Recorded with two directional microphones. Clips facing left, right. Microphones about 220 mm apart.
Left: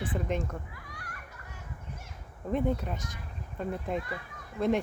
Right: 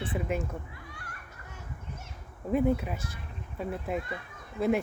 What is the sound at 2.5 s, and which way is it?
Speech, 5° right (ahead or behind).